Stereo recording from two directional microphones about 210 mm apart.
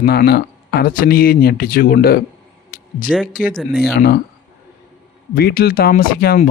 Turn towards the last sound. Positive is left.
turn(degrees=45)  # may be behind; listen again after turning